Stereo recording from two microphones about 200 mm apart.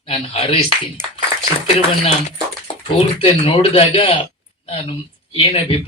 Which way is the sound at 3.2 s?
30° left (ahead or behind).